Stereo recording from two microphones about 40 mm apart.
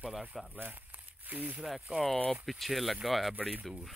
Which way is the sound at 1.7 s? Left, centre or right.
Centre.